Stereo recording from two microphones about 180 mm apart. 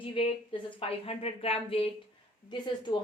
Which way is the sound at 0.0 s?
30° left (ahead or behind).